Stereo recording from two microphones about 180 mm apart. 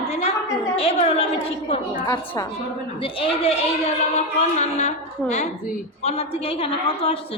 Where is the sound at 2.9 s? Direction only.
30° left (ahead or behind).